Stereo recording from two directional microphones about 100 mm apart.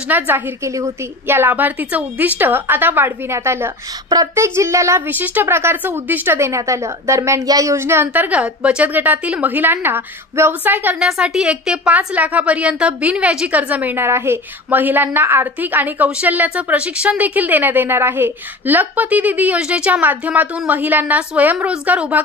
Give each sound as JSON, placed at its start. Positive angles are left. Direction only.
{"t": 0.1, "sound": "a woman's voice", "side_deg": -20}
{"t": 11.1, "sound": "a woman's voice", "side_deg": -10}